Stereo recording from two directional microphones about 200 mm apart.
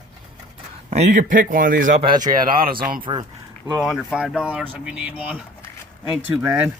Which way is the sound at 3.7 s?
Centre (ahead or behind).